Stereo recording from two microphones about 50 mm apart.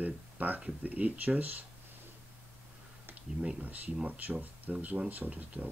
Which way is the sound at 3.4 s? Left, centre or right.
Right.